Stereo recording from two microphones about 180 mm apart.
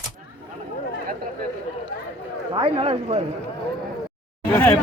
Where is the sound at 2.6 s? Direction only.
30° right (ahead or behind).